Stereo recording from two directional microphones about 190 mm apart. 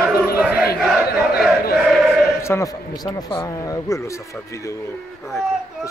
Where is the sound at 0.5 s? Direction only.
Centre (ahead or behind).